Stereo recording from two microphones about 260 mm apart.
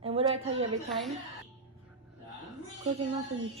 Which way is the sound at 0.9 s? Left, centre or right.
Centre.